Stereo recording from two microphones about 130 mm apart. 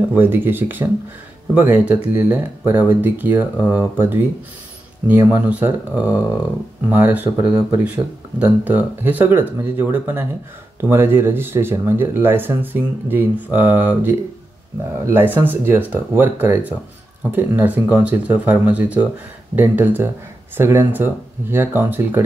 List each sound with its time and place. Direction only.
0.1 s speech: 15° right (ahead or behind)
15.1 s speech: 15° right (ahead or behind)